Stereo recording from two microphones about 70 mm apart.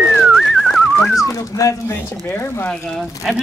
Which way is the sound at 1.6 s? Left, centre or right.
Left.